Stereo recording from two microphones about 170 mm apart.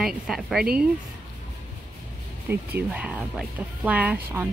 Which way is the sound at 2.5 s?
15° right (ahead or behind).